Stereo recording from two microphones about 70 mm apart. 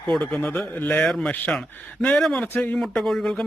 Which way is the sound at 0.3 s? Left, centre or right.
Centre.